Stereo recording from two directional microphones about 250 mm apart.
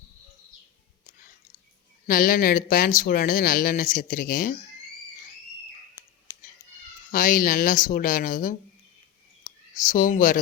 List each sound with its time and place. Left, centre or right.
2.0 s speech: left
7.1 s speech: left